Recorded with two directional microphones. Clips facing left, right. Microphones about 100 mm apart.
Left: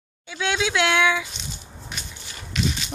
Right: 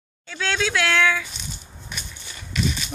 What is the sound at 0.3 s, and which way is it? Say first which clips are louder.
Speech: even; 15° left (ahead or behind).